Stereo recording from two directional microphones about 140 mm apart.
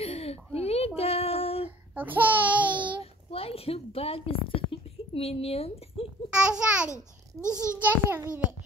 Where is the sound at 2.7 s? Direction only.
35° right (ahead or behind).